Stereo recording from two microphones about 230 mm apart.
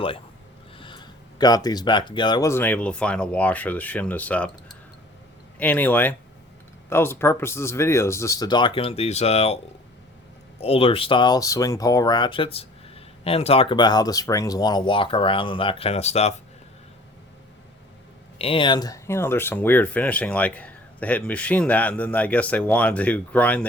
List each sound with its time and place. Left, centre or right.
0.8 s speech: left
10.6 s speech: left
18.3 s speech: left; by 23.6 s centre